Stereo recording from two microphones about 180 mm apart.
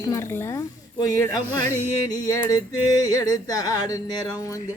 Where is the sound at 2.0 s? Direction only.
20° left (ahead or behind).